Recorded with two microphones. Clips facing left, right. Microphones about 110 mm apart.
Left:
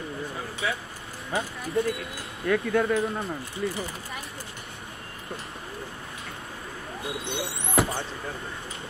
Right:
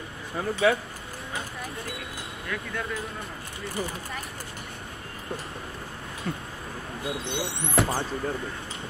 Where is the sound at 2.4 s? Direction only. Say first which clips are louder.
Left 11 dB; 50° left (ahead or behind).